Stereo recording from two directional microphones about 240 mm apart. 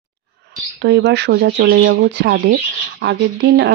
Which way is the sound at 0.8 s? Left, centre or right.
Right.